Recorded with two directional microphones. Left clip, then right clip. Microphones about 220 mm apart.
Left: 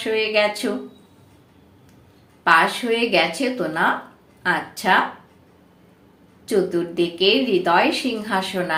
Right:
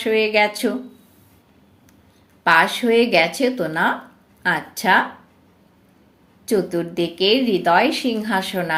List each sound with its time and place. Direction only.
0.0 s a woman's voice: 45° right (ahead or behind)
2.4 s a woman's voice: 45° right (ahead or behind)
6.4 s a woman's voice: 45° right (ahead or behind)